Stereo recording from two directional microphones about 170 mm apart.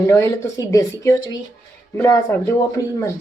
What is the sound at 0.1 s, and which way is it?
Speech, 15° left (ahead or behind).